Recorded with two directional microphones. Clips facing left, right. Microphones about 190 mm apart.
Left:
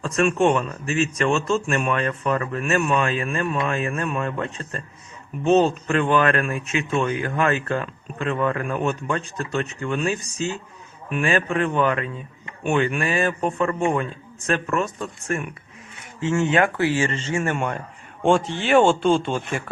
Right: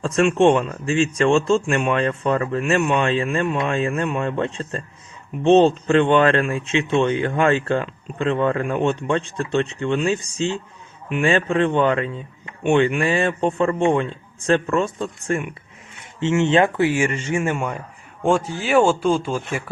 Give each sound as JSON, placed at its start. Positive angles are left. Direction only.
{"t": 0.0, "sound": "speech", "side_deg": -30}
{"t": 18.2, "sound": "speech", "side_deg": 0}